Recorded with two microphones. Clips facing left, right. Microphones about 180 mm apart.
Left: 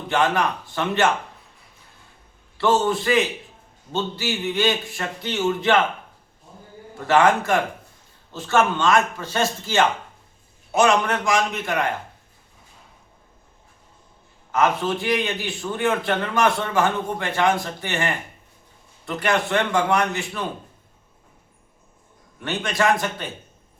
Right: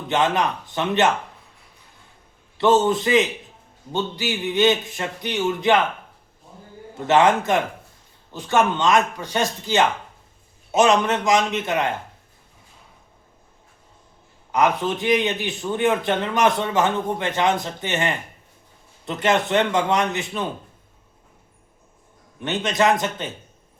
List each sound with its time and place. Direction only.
0.1 s a man's voice: 20° right (ahead or behind)
2.6 s a man's voice: 20° right (ahead or behind)
6.9 s a man's voice: 20° right (ahead or behind)
14.5 s a man's voice: 15° right (ahead or behind)
22.4 s a man's voice: 20° right (ahead or behind)